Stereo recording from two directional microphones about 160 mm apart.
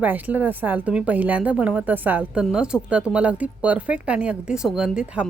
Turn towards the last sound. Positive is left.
turn(degrees=-5)  # may be behind; listen again after turning